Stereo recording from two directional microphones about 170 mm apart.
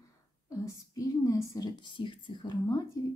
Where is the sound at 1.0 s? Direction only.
20° left (ahead or behind).